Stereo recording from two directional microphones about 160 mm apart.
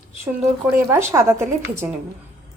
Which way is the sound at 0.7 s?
15° right (ahead or behind).